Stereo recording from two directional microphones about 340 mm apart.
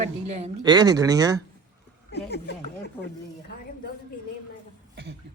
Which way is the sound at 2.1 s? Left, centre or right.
Left.